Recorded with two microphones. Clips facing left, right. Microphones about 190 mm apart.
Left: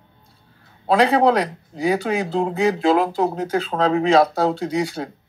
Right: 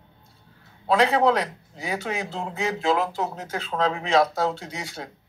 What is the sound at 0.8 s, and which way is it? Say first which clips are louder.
Speech: left 4 dB; 35° left (ahead or behind).